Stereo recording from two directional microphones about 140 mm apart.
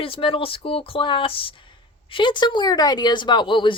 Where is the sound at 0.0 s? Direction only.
40° left (ahead or behind).